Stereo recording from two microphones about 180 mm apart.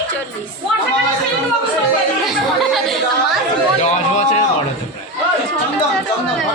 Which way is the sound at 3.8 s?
40° left (ahead or behind).